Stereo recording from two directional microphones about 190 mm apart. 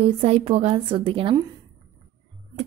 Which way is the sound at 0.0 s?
30° right (ahead or behind).